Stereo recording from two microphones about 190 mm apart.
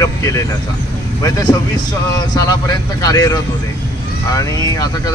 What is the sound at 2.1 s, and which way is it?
Speech, 20° left (ahead or behind).